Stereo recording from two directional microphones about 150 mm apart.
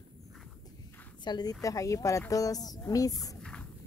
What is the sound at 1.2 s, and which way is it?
A woman's voice, 30° left (ahead or behind).